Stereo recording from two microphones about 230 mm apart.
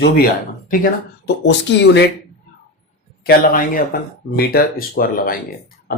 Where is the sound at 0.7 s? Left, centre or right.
Left.